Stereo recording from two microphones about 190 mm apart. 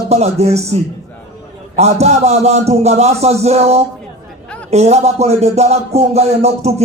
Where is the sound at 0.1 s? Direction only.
35° right (ahead or behind).